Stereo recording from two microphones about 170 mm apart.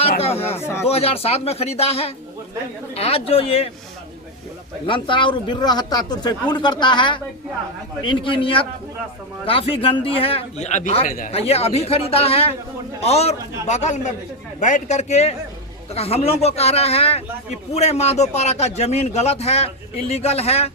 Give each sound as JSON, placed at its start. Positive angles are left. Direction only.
{"t": 0.2, "sound": "a man's voice", "side_deg": 35}
{"t": 4.9, "sound": "a man's voice", "side_deg": 30}